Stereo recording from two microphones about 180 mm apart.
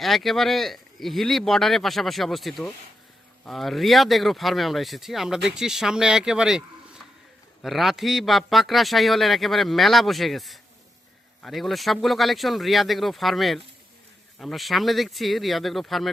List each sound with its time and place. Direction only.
0.0 s speech: centre (ahead or behind)